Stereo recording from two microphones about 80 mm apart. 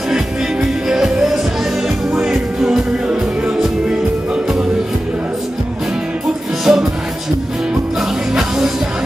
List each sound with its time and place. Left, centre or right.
0.8 s music: centre
2.6 s music: centre
6.6 s music: centre
8.4 s music: centre